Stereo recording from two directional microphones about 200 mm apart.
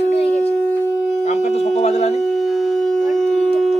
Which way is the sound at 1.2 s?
35° left (ahead or behind).